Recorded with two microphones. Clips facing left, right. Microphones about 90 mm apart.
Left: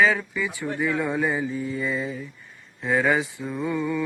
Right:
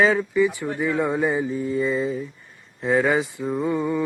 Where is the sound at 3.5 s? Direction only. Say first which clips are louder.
Right 3 dB; 35° right (ahead or behind).